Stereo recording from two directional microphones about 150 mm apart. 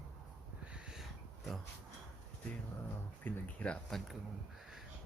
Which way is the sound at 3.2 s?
5° left (ahead or behind).